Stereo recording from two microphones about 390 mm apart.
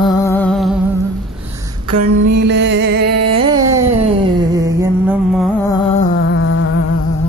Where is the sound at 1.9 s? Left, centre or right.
Right.